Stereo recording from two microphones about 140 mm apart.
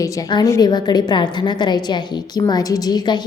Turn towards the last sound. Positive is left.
turn(degrees=30)  # may be behind; listen again after turning